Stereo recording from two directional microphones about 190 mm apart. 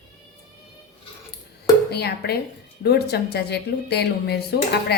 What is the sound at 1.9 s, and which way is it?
A woman's voice, 60° left (ahead or behind).